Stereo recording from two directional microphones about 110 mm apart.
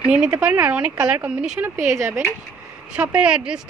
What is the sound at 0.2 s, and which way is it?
Speech, 15° right (ahead or behind).